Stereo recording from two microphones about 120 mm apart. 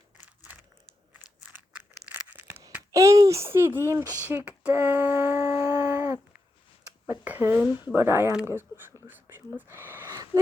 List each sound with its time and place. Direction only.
0.2 s a sound: 15° right (ahead or behind)
2.2 s tearing: 15° right (ahead or behind)
2.9 s a child's voice: 25° right (ahead or behind)
5.0 s dog: 25° right (ahead or behind)
7.1 s speech: 20° right (ahead or behind)